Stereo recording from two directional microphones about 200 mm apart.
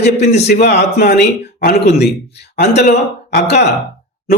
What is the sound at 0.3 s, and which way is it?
A man's voice, 55° left (ahead or behind).